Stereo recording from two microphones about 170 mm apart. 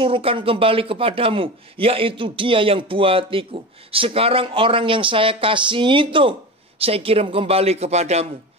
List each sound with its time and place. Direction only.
0.0 s a man's voice: 30° right (ahead or behind)